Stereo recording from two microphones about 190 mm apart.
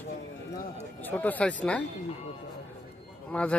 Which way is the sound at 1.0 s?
10° left (ahead or behind).